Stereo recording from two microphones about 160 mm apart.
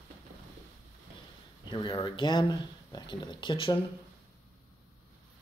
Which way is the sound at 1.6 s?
30° left (ahead or behind).